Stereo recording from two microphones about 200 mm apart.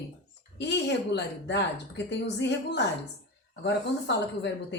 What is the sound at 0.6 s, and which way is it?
A woman's voice, 60° left (ahead or behind).